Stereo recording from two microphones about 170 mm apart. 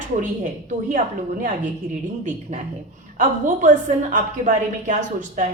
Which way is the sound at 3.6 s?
50° right (ahead or behind).